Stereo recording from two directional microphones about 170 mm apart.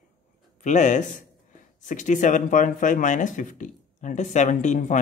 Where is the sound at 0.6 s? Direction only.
45° left (ahead or behind).